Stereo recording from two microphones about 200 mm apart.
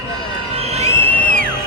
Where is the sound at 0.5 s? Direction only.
30° right (ahead or behind).